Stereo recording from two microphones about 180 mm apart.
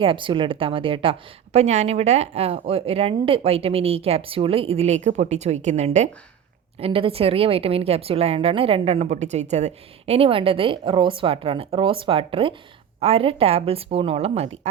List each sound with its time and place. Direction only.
0.0 s a woman's voice: 30° right (ahead or behind)